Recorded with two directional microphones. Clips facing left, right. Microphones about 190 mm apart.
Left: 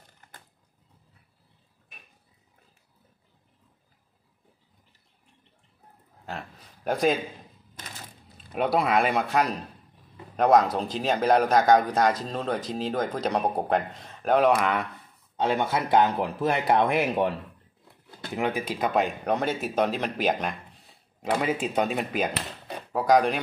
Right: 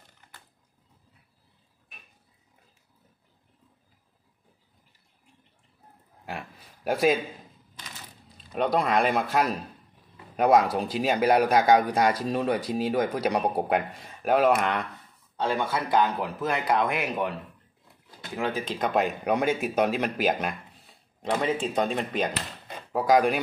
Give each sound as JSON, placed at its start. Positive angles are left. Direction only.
{"t": 6.2, "sound": "speech", "side_deg": -10}
{"t": 8.4, "sound": "speech", "side_deg": 5}
{"t": 15.3, "sound": "speech", "side_deg": 20}
{"t": 18.3, "sound": "speech", "side_deg": 15}